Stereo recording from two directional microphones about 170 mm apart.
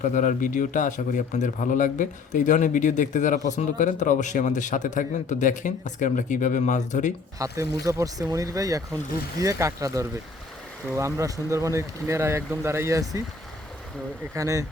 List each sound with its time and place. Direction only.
0.0 s a man's voice: 50° left (ahead or behind)
7.3 s speech: 20° right (ahead or behind)
14.3 s speech: 20° right (ahead or behind)